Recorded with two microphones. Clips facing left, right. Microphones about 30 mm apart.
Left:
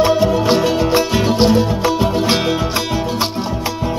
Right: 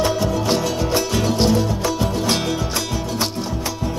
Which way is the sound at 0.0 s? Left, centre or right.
Left.